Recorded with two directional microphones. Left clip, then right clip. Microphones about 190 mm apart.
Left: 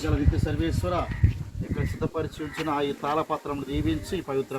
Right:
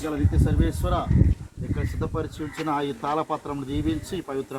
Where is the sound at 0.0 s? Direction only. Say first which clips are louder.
Right 1 dB; 15° left (ahead or behind).